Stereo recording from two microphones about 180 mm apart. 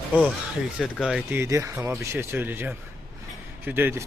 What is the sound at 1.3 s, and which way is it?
Speech, 15° right (ahead or behind).